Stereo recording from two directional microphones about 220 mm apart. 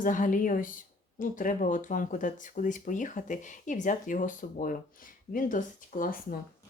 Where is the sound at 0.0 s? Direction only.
35° left (ahead or behind).